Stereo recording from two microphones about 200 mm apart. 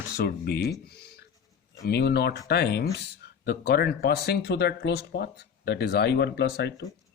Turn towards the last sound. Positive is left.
turn(degrees=55)  # may be behind; listen again after turning